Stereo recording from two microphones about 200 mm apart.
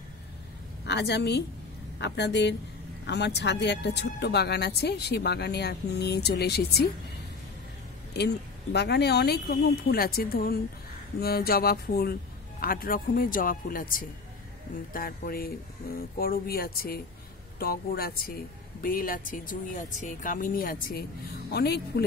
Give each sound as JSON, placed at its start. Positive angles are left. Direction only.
{"t": 0.8, "sound": "speech", "side_deg": 55}
{"t": 8.1, "sound": "speech", "side_deg": 55}